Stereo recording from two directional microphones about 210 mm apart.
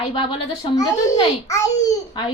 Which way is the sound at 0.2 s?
20° left (ahead or behind).